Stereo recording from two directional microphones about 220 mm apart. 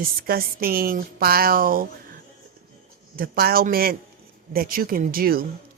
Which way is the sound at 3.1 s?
45° right (ahead or behind).